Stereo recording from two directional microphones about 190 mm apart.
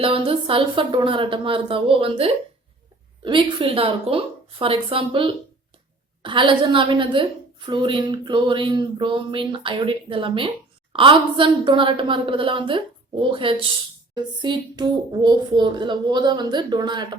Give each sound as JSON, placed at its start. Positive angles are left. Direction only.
{"t": 0.0, "sound": "a woman's voice", "side_deg": -30}